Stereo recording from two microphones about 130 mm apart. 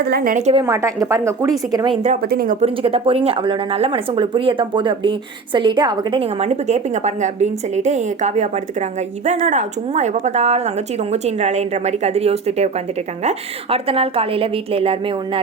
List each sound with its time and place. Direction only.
0.3 s speech: 65° right (ahead or behind)
0.6 s speech: 25° right (ahead or behind)
2.0 s speech: 70° right (ahead or behind)
2.6 s a woman's voice: 45° right (ahead or behind)
6.4 s a woman's voice: 60° right (ahead or behind)
9.5 s a woman's voice: 65° right (ahead or behind); by 15.4 s 45° right (ahead or behind)